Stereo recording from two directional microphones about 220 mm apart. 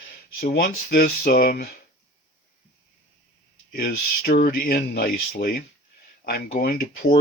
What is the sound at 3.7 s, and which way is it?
Speech, 40° left (ahead or behind).